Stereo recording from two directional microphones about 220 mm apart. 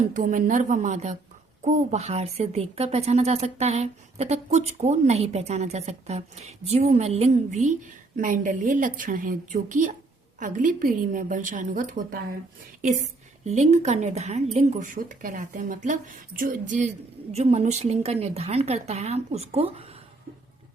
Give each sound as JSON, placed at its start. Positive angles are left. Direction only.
{"t": 0.0, "sound": "speech", "side_deg": -35}
{"t": 13.4, "sound": "a woman's voice", "side_deg": -30}